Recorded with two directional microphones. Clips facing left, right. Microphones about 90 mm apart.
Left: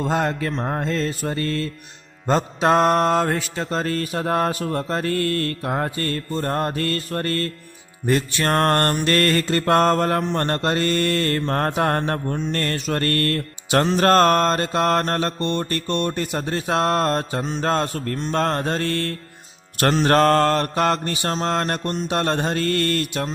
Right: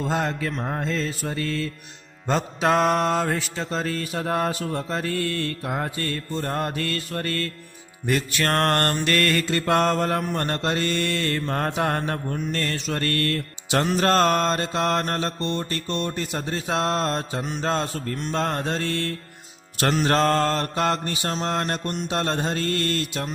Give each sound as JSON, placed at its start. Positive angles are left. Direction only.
{"t": 0.0, "sound": "mantra", "side_deg": 55}
{"t": 0.5, "sound": "mantra", "side_deg": 30}
{"t": 8.0, "sound": "music", "side_deg": 30}
{"t": 9.0, "sound": "mantra", "side_deg": 40}